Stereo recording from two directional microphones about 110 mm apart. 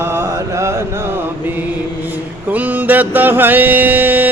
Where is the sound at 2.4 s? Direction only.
15° right (ahead or behind).